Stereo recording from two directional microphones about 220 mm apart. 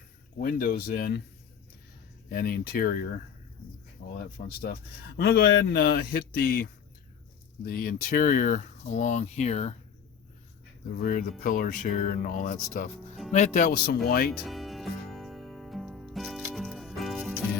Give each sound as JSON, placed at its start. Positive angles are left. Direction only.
{"t": 0.3, "sound": "a man's voice", "side_deg": 40}
{"t": 2.3, "sound": "a man's voice", "side_deg": 45}
{"t": 10.9, "sound": "speech", "side_deg": 40}
{"t": 14.4, "sound": "music", "side_deg": 0}